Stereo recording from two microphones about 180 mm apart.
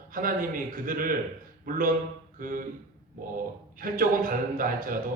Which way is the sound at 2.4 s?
50° right (ahead or behind).